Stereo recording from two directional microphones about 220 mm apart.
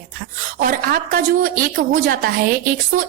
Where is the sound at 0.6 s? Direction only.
40° right (ahead or behind).